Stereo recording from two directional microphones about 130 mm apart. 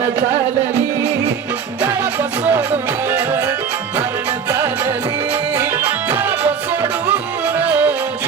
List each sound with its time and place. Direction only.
1.8 s music: 15° right (ahead or behind)
7.6 s music: 10° right (ahead or behind)